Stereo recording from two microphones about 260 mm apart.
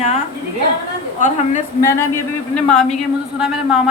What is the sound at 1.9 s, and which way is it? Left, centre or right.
A man's voice, centre.